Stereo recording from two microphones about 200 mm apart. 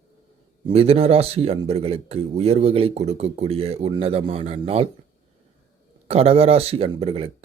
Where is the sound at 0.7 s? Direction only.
30° right (ahead or behind).